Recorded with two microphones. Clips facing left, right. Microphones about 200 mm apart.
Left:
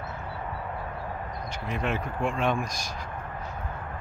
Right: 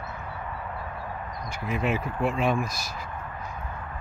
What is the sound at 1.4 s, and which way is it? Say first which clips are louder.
Speech: right 3 dB; 5° right (ahead or behind).